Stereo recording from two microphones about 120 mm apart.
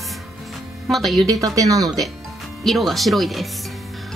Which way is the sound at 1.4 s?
30° right (ahead or behind).